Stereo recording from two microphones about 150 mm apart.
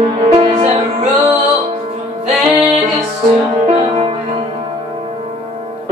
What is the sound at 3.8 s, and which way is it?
Music, 40° right (ahead or behind).